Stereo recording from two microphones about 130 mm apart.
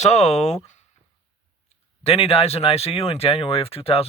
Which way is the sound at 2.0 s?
50° left (ahead or behind).